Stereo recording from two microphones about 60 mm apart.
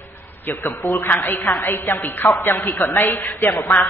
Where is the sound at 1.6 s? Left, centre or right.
Left.